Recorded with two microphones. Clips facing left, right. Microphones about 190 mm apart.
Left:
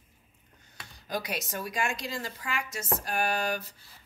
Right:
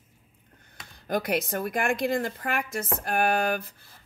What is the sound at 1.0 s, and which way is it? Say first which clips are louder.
A woman's voice: right 7 dB; 55° right (ahead or behind).